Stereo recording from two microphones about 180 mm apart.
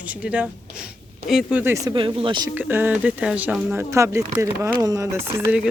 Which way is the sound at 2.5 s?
10° right (ahead or behind).